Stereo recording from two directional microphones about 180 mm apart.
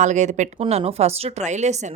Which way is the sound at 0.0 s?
40° right (ahead or behind).